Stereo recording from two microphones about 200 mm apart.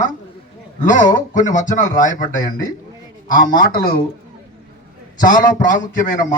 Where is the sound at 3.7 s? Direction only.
45° left (ahead or behind).